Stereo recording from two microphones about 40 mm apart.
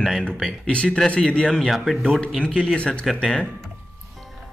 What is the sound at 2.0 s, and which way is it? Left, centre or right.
Speech, centre.